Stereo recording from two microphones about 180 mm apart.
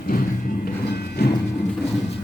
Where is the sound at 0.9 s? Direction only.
65° left (ahead or behind).